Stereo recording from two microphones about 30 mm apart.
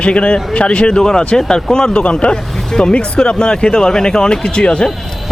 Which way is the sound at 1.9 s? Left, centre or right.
Left.